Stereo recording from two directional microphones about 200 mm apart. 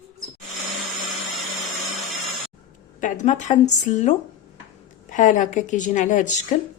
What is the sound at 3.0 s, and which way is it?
A woman's voice, 40° left (ahead or behind).